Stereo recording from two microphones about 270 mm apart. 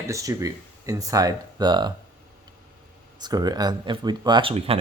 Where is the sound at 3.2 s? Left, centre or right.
Centre.